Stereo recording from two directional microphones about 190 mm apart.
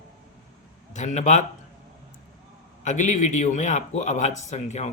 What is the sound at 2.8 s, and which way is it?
Speech, 40° left (ahead or behind).